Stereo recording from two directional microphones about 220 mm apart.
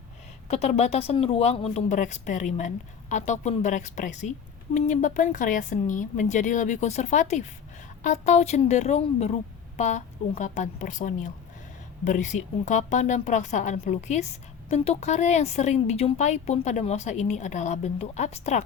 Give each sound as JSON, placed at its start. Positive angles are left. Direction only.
{"t": 0.4, "sound": "speech", "side_deg": 30}